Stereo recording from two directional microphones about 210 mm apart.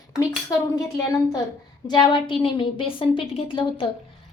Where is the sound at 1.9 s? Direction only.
20° left (ahead or behind).